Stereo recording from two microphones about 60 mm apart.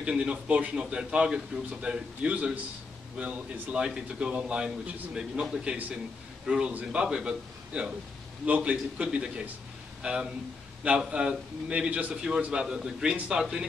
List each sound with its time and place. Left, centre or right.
0.0 s a man's voice: centre